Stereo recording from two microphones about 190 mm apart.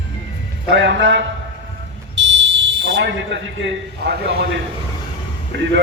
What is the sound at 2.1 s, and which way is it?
Fire alarm, 70° right (ahead or behind).